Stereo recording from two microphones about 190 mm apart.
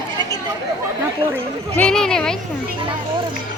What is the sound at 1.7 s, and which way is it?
Speech, 5° left (ahead or behind).